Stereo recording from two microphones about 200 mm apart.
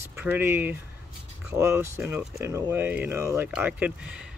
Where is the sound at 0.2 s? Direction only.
10° right (ahead or behind).